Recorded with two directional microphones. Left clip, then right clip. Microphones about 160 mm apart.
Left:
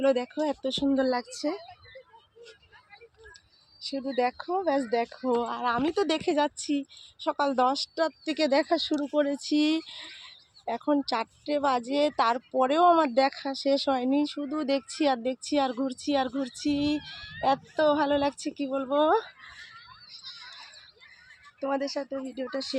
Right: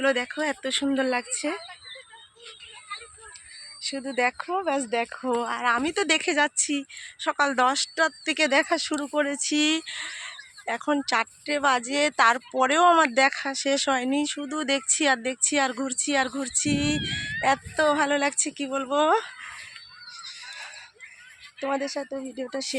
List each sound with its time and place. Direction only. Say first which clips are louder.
0.0 s speech: right 1 dB; 5° left (ahead or behind)
0.9 s speech: even; 10° right (ahead or behind)
1.3 s speech: right 2 dB; 45° right (ahead or behind)
3.8 s speech: right 2 dB; 5° right (ahead or behind)
21.6 s speech: right 2 dB; 30° right (ahead or behind)